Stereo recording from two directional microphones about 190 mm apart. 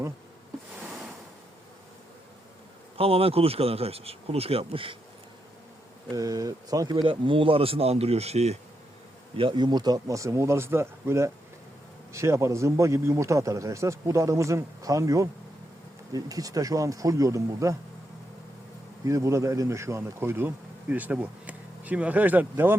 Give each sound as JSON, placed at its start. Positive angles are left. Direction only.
{"t": 3.0, "sound": "speech", "side_deg": -30}
{"t": 6.1, "sound": "a man's voice", "side_deg": -20}
{"t": 19.0, "sound": "a man's voice", "side_deg": -15}